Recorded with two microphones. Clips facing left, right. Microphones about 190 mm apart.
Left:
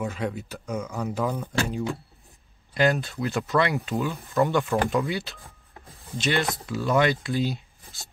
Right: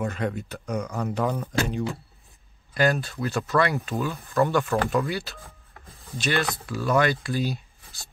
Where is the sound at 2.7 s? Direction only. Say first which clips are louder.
Even; 20° left (ahead or behind).